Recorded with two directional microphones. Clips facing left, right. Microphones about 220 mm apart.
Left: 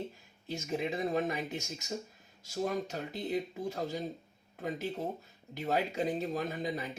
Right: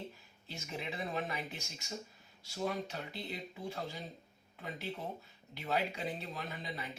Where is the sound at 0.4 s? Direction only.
45° left (ahead or behind).